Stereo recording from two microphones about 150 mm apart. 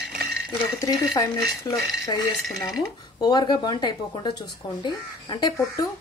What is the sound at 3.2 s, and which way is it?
Speech, 25° left (ahead or behind).